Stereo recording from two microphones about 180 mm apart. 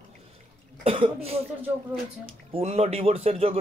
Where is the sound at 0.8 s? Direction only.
30° right (ahead or behind).